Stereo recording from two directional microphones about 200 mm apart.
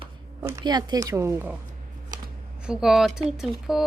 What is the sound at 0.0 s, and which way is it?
Speech, 20° right (ahead or behind).